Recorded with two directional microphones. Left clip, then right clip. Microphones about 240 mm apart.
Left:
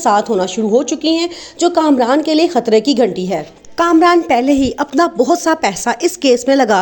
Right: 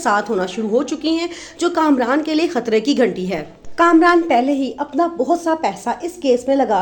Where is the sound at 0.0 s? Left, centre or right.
Centre.